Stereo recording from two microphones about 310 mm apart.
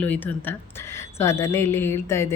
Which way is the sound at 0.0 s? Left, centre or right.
Centre.